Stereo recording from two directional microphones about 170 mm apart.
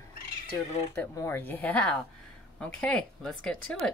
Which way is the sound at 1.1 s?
15° left (ahead or behind).